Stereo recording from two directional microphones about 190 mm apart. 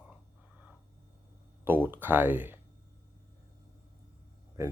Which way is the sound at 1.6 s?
10° right (ahead or behind).